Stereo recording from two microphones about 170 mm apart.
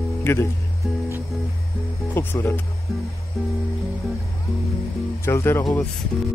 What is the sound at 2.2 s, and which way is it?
Speech, 15° left (ahead or behind).